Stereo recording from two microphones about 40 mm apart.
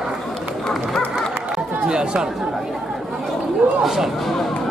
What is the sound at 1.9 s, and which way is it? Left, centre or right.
Speech, right.